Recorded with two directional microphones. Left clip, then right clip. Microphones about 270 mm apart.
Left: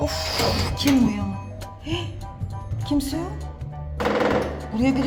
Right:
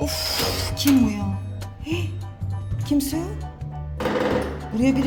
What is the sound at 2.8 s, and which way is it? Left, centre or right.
Speech, centre.